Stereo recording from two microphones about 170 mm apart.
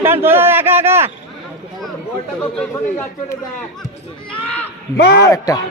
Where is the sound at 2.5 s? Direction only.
5° left (ahead or behind).